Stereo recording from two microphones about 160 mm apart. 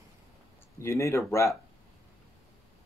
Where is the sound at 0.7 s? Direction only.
20° left (ahead or behind).